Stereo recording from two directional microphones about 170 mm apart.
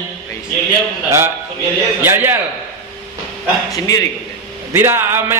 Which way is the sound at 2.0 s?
15° right (ahead or behind).